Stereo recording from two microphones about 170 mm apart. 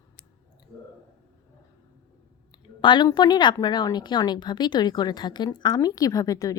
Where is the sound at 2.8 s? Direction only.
25° left (ahead or behind).